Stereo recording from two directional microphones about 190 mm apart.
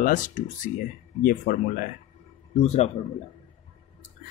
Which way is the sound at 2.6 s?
35° left (ahead or behind).